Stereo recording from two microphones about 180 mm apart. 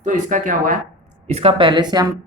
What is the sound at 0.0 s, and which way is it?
Speech, 45° right (ahead or behind).